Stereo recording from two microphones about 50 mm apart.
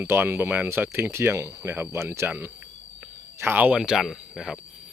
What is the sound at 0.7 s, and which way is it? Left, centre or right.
Speech, right.